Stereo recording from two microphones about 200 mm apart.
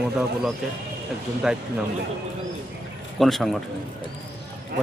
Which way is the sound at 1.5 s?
5° right (ahead or behind).